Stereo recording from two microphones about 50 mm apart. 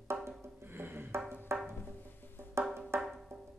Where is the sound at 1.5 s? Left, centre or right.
Right.